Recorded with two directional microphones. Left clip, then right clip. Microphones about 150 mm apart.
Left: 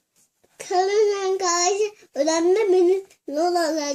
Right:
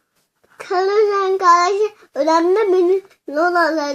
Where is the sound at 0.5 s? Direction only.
40° right (ahead or behind).